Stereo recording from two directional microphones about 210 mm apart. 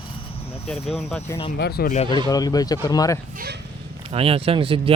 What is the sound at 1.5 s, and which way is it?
Speech, 45° left (ahead or behind).